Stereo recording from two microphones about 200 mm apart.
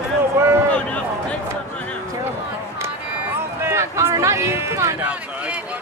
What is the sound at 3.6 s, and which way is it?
Speech, 15° right (ahead or behind).